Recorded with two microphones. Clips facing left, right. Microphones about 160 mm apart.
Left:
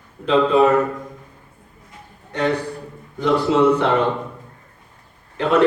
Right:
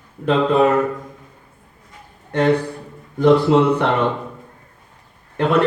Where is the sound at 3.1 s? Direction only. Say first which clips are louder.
Right 4 dB; 55° right (ahead or behind).